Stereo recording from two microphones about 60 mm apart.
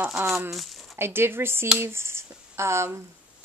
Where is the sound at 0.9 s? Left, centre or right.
Right.